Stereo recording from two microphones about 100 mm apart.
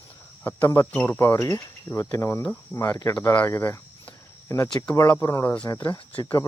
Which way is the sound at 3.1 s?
15° left (ahead or behind).